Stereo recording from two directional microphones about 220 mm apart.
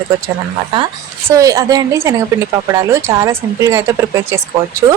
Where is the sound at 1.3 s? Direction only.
15° right (ahead or behind).